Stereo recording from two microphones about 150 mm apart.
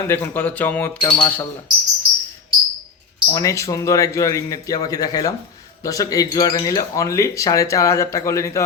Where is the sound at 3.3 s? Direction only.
20° left (ahead or behind).